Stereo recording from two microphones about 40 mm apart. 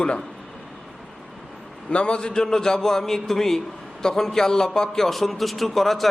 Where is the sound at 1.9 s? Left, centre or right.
Left.